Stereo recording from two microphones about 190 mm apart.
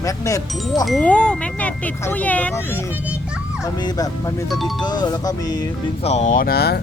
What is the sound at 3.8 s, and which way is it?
Music, 20° left (ahead or behind).